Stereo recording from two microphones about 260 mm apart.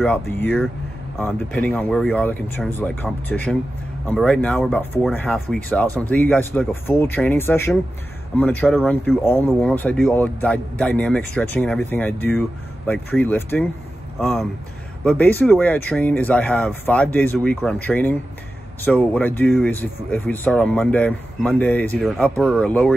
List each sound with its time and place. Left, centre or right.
0.0 s speech: centre
15.0 s speech: centre